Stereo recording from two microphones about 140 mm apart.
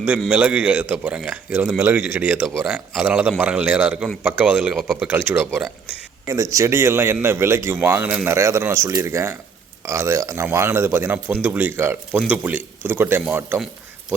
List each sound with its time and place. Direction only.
0.3 s a man's voice: 10° right (ahead or behind)
5.0 s a man's voice: 15° right (ahead or behind)